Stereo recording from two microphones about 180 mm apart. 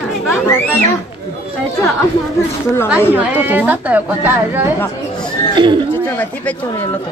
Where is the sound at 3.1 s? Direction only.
10° right (ahead or behind).